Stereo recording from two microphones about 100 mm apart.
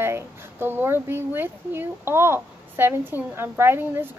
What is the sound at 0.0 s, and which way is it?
Speech, 25° right (ahead or behind).